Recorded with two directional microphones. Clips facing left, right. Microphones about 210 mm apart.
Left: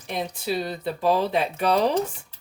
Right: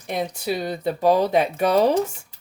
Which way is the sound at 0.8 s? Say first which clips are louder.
Right 5 dB; 45° right (ahead or behind).